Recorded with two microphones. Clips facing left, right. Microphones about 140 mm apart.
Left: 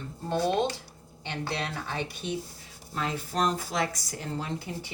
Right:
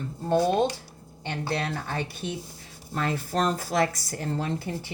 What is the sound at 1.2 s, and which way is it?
A woman's voice, 45° right (ahead or behind).